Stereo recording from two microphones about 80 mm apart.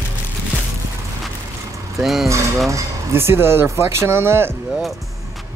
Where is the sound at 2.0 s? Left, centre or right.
Centre.